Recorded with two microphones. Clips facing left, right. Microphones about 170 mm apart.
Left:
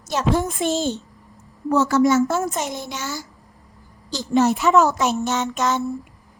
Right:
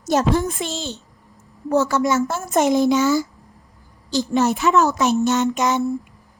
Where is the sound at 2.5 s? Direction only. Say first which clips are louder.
Right 11 dB; 75° right (ahead or behind); by 2.9 s 90° right.